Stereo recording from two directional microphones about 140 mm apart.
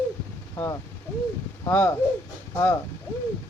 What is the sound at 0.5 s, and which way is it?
Speech, 25° left (ahead or behind).